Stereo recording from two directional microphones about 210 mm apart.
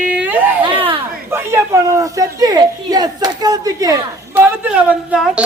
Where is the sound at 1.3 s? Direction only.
15° right (ahead or behind).